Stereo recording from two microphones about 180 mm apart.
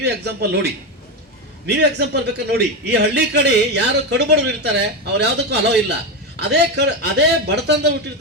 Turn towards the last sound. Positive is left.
turn(degrees=-70)  # may be behind; listen again after turning